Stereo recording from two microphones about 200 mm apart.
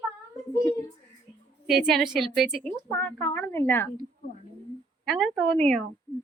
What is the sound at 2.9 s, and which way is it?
A woman's voice, 10° left (ahead or behind).